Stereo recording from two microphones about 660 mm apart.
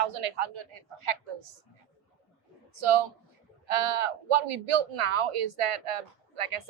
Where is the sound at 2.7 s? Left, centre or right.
Right.